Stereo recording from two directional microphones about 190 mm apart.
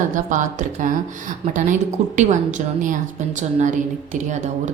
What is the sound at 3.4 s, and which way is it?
A woman's voice, 40° right (ahead or behind).